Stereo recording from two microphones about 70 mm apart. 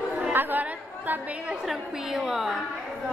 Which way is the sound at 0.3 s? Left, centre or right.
Right.